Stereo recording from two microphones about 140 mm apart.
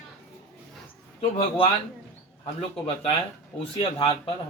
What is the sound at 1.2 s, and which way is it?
Speech, 45° left (ahead or behind).